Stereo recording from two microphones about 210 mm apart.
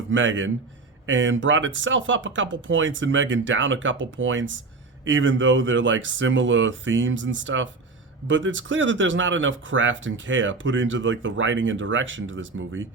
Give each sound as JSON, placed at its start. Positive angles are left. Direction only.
{"t": 0.1, "sound": "speech", "side_deg": -65}